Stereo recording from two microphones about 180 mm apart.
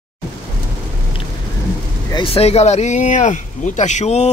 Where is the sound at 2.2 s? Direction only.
35° left (ahead or behind).